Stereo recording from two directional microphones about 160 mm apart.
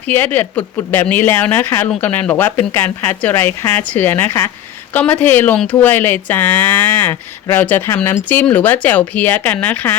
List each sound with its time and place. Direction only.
0.1 s speech: 10° left (ahead or behind)